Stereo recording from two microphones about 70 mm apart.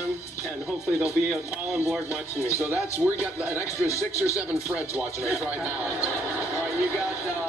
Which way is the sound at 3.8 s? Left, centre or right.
Left.